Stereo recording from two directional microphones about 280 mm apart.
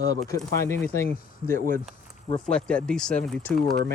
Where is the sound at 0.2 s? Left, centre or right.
Centre.